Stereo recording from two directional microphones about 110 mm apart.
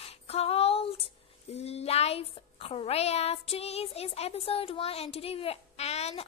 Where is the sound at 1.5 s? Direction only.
70° left (ahead or behind).